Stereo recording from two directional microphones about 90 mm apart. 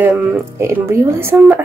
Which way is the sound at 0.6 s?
25° right (ahead or behind).